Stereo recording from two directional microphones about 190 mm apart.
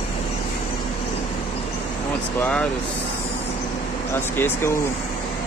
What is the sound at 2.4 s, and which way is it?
Speech, 5° left (ahead or behind).